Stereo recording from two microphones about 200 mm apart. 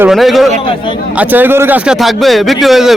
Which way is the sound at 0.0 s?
Centre (ahead or behind).